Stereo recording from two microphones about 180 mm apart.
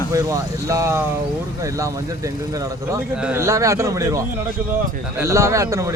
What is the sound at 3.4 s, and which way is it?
Speech, 15° right (ahead or behind).